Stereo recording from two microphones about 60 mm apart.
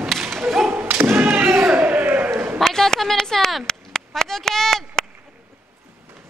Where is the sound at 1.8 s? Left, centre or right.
Right.